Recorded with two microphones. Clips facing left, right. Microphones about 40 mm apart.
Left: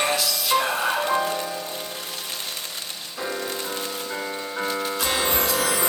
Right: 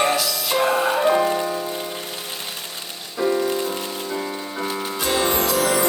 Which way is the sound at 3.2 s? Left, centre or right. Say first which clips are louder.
Right 9 dB; centre.